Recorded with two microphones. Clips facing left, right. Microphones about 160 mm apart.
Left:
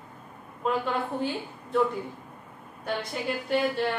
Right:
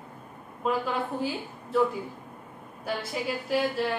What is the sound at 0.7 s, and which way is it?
A woman's voice, 5° right (ahead or behind).